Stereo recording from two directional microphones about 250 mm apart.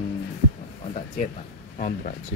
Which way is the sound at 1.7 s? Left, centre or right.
Left.